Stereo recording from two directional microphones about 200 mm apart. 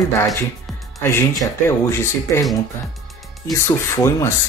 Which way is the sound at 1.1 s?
15° left (ahead or behind).